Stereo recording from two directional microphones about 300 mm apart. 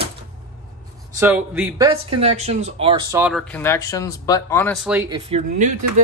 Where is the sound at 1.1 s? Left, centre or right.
Centre.